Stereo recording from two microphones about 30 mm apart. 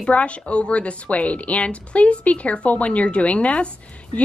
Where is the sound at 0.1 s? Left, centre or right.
Left.